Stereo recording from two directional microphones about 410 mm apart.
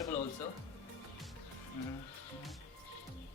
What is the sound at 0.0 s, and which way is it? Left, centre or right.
Music, centre.